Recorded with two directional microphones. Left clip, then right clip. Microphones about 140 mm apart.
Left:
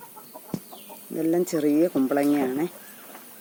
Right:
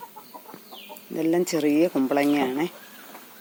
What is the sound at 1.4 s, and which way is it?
Speech, centre (ahead or behind).